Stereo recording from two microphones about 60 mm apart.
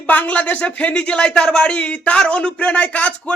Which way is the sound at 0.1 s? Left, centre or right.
Left.